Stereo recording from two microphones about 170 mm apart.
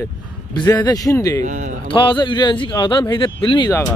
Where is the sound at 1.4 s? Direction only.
45° right (ahead or behind).